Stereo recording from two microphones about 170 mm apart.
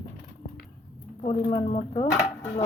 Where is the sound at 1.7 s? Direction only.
40° left (ahead or behind).